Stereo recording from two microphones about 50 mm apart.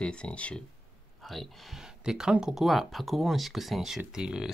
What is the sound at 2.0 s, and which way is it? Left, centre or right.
Speech, centre.